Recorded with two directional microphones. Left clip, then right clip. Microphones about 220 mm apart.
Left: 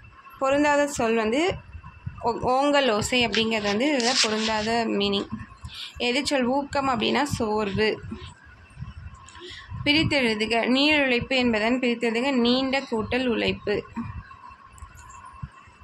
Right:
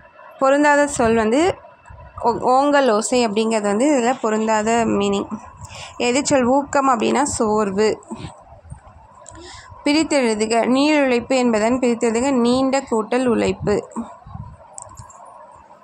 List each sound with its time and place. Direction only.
0.4 s a woman's voice: 25° right (ahead or behind)
9.4 s a woman's voice: 30° right (ahead or behind)